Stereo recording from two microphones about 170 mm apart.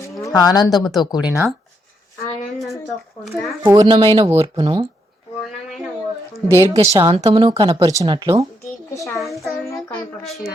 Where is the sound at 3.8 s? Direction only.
30° right (ahead or behind).